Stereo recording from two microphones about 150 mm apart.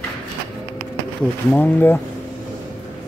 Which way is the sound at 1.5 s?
15° left (ahead or behind).